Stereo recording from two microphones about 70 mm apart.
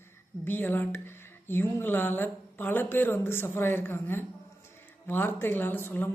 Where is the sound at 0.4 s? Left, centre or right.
Left.